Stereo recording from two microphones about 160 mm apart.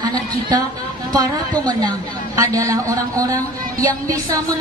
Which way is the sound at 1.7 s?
20° right (ahead or behind).